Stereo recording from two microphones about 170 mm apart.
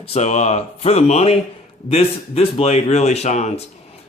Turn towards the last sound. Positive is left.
turn(degrees=40)  # may be behind; listen again after turning